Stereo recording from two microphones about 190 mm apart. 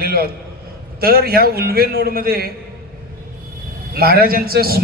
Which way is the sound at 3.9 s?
50° right (ahead or behind).